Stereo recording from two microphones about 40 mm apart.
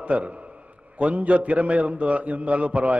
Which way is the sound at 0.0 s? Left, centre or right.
Right.